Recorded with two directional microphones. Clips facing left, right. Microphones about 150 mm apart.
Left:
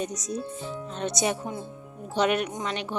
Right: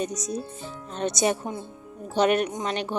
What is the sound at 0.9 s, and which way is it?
Speech, 45° right (ahead or behind).